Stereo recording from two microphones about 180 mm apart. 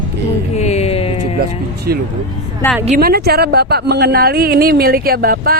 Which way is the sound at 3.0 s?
60° right (ahead or behind).